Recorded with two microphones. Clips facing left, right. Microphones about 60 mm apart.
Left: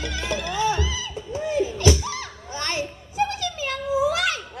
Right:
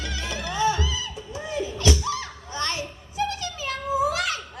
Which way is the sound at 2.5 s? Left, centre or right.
Left.